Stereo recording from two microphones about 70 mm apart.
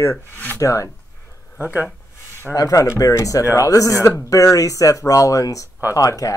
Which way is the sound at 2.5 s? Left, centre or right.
Left.